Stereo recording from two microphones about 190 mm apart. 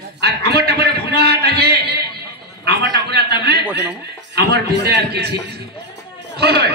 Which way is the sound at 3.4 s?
60° right (ahead or behind).